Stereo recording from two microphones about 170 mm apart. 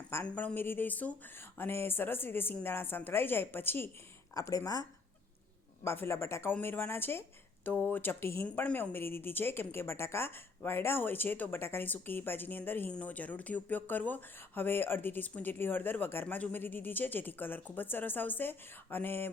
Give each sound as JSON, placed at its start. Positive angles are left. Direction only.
{"t": 0.1, "sound": "speech", "side_deg": 10}